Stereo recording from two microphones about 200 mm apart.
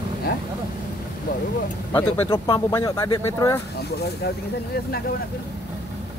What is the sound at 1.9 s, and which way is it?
Speech, 10° left (ahead or behind).